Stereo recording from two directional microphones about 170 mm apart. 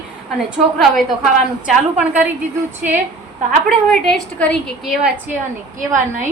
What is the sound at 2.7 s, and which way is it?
Speech, 10° right (ahead or behind).